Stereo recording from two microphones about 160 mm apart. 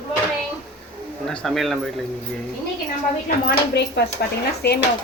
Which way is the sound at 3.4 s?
90° left.